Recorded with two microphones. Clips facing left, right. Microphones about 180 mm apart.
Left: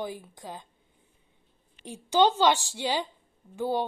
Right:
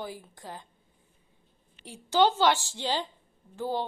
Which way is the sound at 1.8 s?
20° left (ahead or behind).